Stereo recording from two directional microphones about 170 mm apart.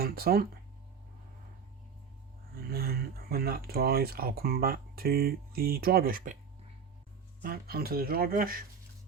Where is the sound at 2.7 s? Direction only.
65° right (ahead or behind).